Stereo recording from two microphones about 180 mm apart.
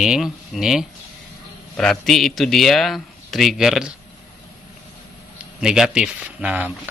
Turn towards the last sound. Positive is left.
turn(degrees=-10)  # may be behind; listen again after turning